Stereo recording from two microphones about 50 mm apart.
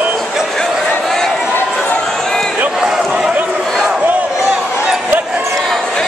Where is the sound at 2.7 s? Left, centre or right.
Centre.